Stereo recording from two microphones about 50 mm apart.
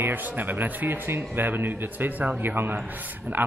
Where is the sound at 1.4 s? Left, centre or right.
Right.